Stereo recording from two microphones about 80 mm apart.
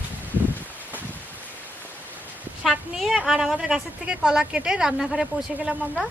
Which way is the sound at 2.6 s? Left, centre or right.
Centre.